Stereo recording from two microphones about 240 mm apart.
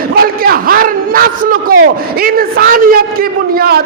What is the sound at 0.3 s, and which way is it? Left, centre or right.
A man's voice, right.